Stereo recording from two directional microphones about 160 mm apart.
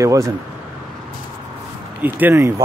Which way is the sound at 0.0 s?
20° right (ahead or behind).